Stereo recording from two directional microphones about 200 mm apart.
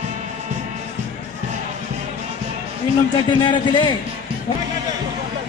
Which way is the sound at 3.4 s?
25° left (ahead or behind).